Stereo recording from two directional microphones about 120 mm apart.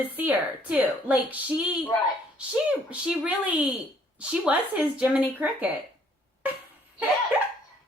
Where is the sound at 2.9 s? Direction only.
10° right (ahead or behind).